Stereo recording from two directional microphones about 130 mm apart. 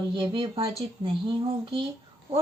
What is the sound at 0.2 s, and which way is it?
Speech, 40° right (ahead or behind).